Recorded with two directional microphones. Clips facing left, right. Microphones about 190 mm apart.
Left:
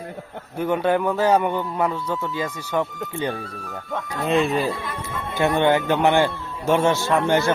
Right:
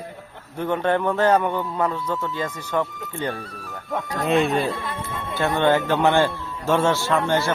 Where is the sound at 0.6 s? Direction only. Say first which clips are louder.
Left 1 dB; 10° left (ahead or behind).